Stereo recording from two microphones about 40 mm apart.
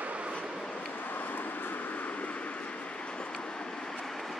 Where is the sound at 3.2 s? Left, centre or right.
Left; by 4.4 s centre.